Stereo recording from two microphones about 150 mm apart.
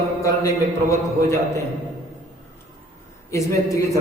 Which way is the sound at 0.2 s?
20° left (ahead or behind).